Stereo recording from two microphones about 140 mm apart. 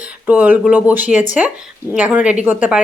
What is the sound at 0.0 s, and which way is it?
A woman's voice, 10° right (ahead or behind).